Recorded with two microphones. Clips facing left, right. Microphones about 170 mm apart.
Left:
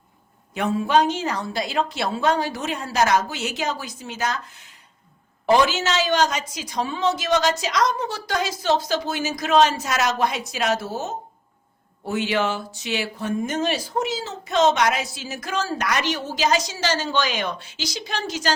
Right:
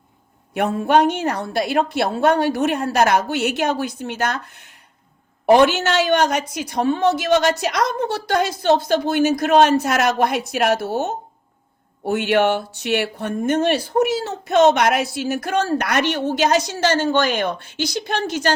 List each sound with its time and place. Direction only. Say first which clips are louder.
0.5 s speech: right 3 dB; 60° right (ahead or behind)